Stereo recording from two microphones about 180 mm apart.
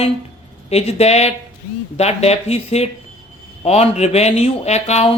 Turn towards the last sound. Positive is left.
turn(degrees=35)  # may be behind; listen again after turning